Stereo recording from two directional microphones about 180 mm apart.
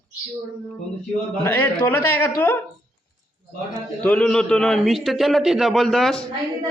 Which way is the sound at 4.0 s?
5° left (ahead or behind).